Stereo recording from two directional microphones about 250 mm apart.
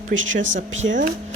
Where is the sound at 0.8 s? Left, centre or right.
Right.